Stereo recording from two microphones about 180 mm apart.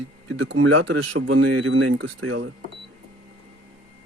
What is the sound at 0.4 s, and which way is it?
Speech, 85° right.